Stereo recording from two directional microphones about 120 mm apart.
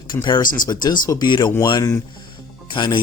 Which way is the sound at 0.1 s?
35° left (ahead or behind).